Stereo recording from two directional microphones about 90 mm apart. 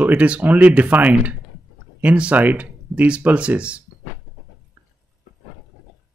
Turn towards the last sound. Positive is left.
turn(degrees=-20)  # may be behind; listen again after turning